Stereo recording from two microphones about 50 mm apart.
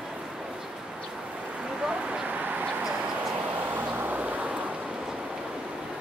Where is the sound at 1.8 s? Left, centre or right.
Centre.